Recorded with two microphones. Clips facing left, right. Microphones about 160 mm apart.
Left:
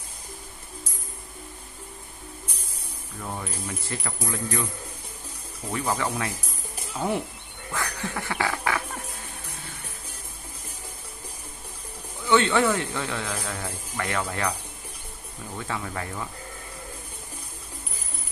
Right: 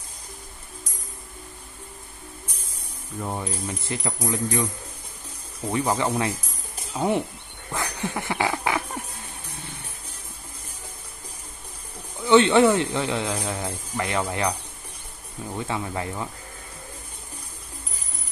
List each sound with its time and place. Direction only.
3.2 s speech: 20° right (ahead or behind)
5.9 s speech: 25° right (ahead or behind)
12.3 s speech: 20° right (ahead or behind)
15.5 s speech: 20° right (ahead or behind)